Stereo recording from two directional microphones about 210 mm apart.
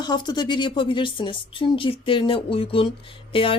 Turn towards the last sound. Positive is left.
turn(degrees=25)  # may be behind; listen again after turning